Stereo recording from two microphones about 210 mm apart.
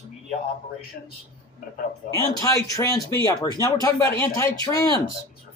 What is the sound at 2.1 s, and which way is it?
Speech, 15° left (ahead or behind).